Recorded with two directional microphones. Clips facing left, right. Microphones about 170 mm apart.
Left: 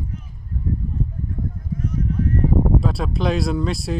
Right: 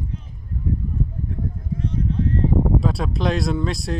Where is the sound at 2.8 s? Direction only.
Centre (ahead or behind).